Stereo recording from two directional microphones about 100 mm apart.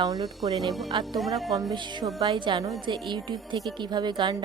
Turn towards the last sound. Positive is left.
turn(degrees=-45)  # may be behind; listen again after turning